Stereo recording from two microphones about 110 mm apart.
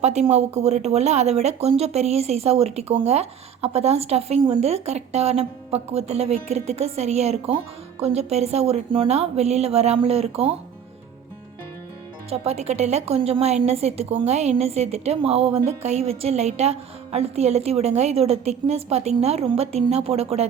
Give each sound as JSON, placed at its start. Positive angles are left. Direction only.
{"t": 0.0, "sound": "a woman's voice", "side_deg": -90}
{"t": 12.3, "sound": "a woman's voice", "side_deg": -75}
{"t": 14.3, "sound": "a woman's voice", "side_deg": -85}